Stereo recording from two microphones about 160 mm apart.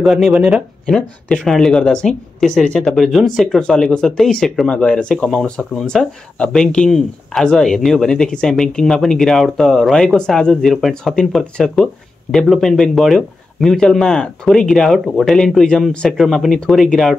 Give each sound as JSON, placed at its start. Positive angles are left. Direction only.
{"t": 0.0, "sound": "speech", "side_deg": 0}